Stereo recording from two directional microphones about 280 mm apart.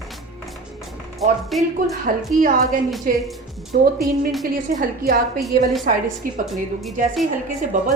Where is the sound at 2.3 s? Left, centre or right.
Right.